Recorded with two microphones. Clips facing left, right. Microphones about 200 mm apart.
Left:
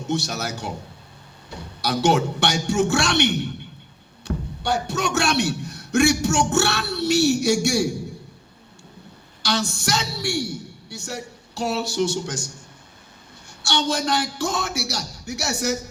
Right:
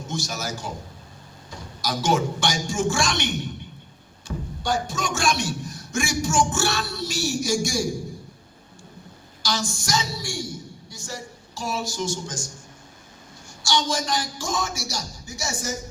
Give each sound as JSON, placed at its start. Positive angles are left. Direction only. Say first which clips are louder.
{"t": 0.0, "sound": "a man's voice", "louder": "left 5 dB", "side_deg": 65}
{"t": 4.3, "sound": "a sound", "louder": "left 4 dB", "side_deg": 65}
{"t": 4.6, "sound": "a man's voice", "louder": "left 2 dB", "side_deg": 65}
{"t": 9.4, "sound": "a woman's voice", "louder": "left 4 dB", "side_deg": 65}
{"t": 13.6, "sound": "a man's voice", "louder": "left 1 dB", "side_deg": 65}